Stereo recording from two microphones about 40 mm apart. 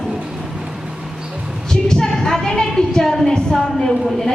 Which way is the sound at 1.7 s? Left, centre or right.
Centre.